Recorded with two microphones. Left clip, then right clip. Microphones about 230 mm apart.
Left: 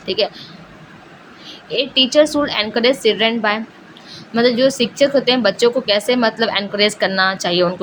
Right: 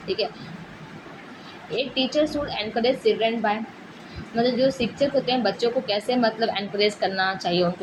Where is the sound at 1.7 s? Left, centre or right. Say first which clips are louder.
Left 9 dB; left.